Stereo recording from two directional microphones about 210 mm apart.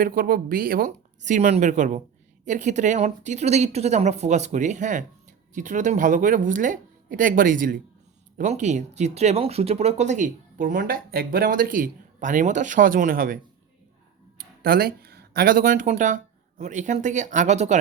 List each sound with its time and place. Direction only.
0.0 s speech: 40° right (ahead or behind)